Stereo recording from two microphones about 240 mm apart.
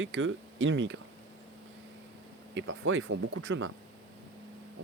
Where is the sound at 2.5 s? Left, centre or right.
Right.